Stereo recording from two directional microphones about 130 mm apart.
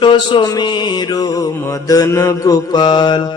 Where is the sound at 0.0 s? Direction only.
35° left (ahead or behind).